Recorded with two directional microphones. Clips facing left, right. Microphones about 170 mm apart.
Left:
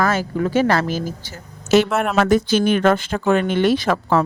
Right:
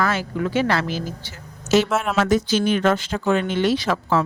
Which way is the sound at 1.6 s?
60° left (ahead or behind).